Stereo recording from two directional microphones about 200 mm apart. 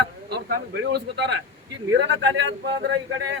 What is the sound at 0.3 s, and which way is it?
A man's voice, 55° right (ahead or behind).